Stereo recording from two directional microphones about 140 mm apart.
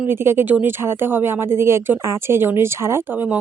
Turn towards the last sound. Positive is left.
turn(degrees=-15)  # may be behind; listen again after turning